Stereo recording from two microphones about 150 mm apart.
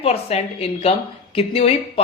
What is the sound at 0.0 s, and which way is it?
A woman's voice, 40° left (ahead or behind).